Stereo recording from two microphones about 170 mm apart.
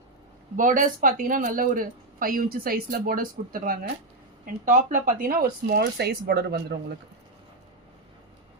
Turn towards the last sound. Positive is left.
turn(degrees=-70)  # may be behind; listen again after turning